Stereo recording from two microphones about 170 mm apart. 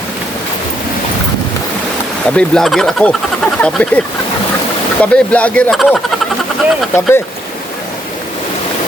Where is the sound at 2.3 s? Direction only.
5° left (ahead or behind).